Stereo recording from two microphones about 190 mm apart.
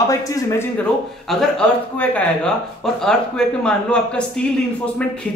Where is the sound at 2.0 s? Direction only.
5° left (ahead or behind).